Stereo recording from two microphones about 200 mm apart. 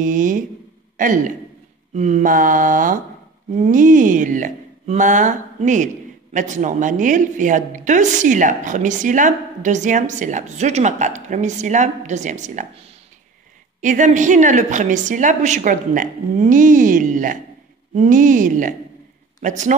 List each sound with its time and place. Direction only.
0.0 s a woman's voice: 40° right (ahead or behind)